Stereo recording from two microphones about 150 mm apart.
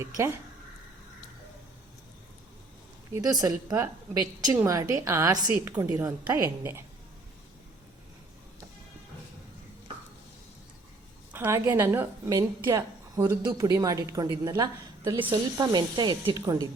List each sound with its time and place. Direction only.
0.0 s a woman's voice: 20° right (ahead or behind)
3.1 s a woman's voice: 25° right (ahead or behind)
5.7 s a woman's voice: 10° right (ahead or behind)
11.3 s a woman's voice: 15° right (ahead or behind); by 16.4 s 30° right (ahead or behind)